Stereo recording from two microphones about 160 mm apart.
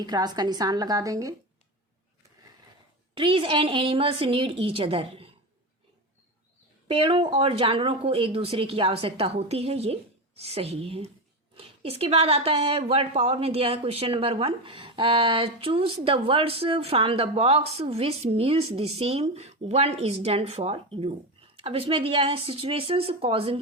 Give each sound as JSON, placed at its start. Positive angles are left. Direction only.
{"t": 0.0, "sound": "a woman's voice", "side_deg": -25}
{"t": 3.2, "sound": "a woman's voice", "side_deg": -35}
{"t": 6.8, "sound": "a woman's voice", "side_deg": -35}